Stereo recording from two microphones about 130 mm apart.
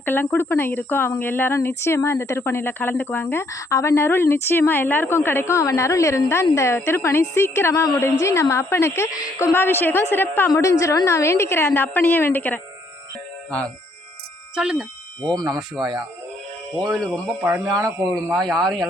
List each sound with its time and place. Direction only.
0.0 s speech: 15° left (ahead or behind)
14.5 s a man's voice: 5° right (ahead or behind)
15.2 s speech: 35° right (ahead or behind)
16.9 s a man's voice: centre (ahead or behind)
17.4 s speech: 25° right (ahead or behind)
18.4 s a man's voice: 5° left (ahead or behind)